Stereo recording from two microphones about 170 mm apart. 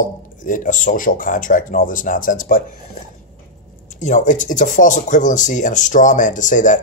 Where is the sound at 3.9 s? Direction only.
45° left (ahead or behind).